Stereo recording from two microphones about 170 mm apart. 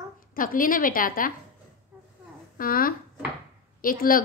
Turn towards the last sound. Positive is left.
turn(degrees=55)  # may be behind; listen again after turning